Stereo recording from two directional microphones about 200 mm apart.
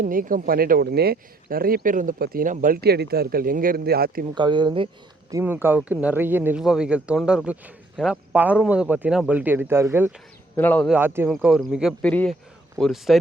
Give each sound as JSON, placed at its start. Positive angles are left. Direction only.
{"t": 0.0, "sound": "speech", "side_deg": -45}
{"t": 4.4, "sound": "speech", "side_deg": -20}
{"t": 5.3, "sound": "speech", "side_deg": -10}
{"t": 10.6, "sound": "speech", "side_deg": 5}
{"t": 10.9, "sound": "speech", "side_deg": -10}